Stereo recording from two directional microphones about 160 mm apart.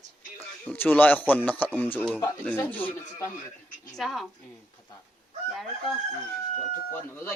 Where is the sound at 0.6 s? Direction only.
10° left (ahead or behind).